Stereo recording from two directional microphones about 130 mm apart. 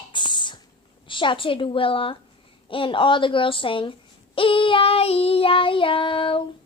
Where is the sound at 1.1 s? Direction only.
40° left (ahead or behind).